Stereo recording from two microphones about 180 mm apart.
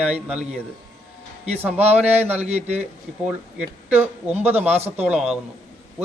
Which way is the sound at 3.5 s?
10° right (ahead or behind).